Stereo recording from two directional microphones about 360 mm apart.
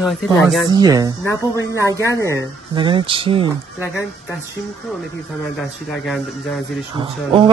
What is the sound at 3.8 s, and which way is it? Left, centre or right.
Speech, centre.